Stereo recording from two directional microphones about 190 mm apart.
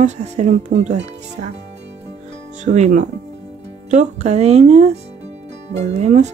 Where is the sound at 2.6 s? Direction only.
40° right (ahead or behind).